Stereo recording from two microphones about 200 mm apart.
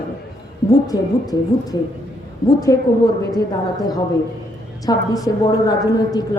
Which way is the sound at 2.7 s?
15° left (ahead or behind).